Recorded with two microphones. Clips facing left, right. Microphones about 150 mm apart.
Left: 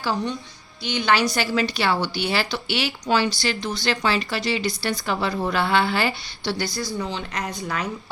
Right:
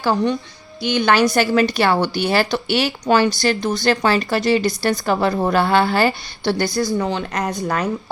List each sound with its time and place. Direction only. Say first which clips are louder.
0.0 s speech: right 7 dB; 55° right (ahead or behind)